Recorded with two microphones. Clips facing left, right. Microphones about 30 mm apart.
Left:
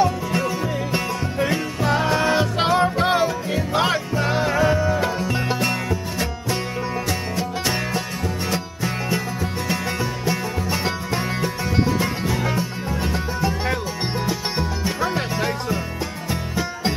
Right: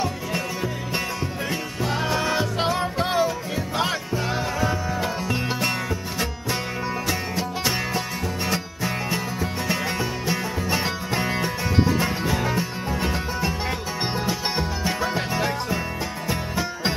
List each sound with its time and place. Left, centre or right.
0.3 s music: centre
5.2 s music: centre